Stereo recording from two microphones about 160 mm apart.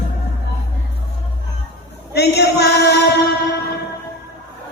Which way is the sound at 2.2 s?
90° left.